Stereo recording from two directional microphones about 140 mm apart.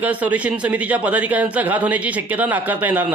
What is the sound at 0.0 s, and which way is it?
Speech, 10° right (ahead or behind).